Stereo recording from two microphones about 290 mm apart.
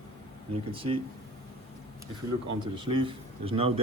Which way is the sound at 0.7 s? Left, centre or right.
Centre.